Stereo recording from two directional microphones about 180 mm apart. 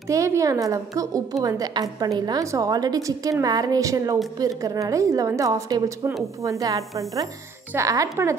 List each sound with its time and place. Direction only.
0.1 s a woman's voice: 15° right (ahead or behind)